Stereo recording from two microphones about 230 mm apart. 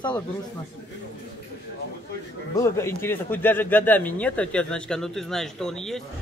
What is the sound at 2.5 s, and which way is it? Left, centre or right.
Speech, centre.